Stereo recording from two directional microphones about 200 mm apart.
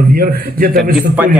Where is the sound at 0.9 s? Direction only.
5° right (ahead or behind).